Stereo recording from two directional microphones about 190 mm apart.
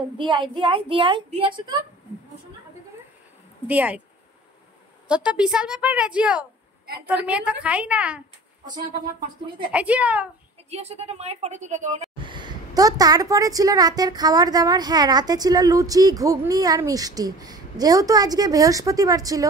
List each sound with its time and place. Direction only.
0.2 s a woman's voice: 25° right (ahead or behind)
3.6 s a woman's voice: 10° right (ahead or behind)
5.0 s a woman's voice: 5° right (ahead or behind)
9.7 s a woman's voice: 5° right (ahead or behind)
10.7 s a woman's voice: 35° right (ahead or behind)
12.2 s a woman's voice: 25° right (ahead or behind)